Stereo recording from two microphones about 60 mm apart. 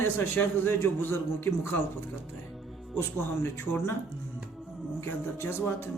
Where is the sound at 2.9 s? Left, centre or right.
Left.